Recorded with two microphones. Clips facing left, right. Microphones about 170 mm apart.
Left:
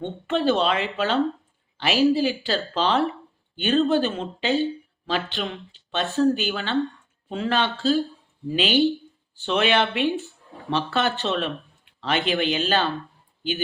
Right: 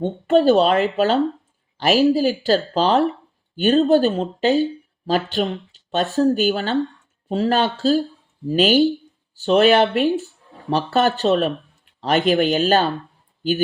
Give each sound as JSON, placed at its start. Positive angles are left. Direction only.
{"t": 0.0, "sound": "speech", "side_deg": -40}